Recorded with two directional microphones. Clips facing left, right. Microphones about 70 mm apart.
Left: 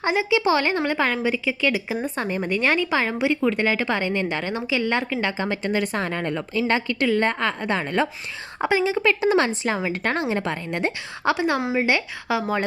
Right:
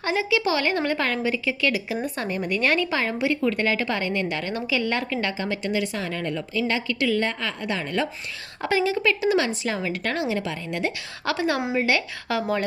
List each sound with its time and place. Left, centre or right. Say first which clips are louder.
0.0 s a woman's voice: left 3 dB; left
8.6 s a woman's voice: left 2 dB; centre
11.3 s a woman's voice: left 2 dB; left